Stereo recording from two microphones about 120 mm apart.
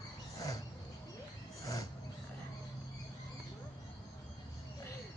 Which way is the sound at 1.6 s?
30° left (ahead or behind).